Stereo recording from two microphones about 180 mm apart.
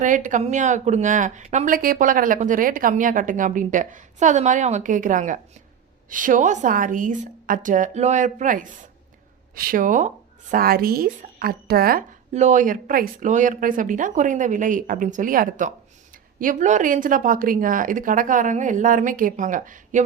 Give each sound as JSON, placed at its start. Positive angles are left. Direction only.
{"t": 0.0, "sound": "speech", "side_deg": -45}